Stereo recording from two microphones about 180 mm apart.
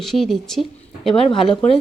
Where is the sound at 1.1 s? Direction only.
30° left (ahead or behind).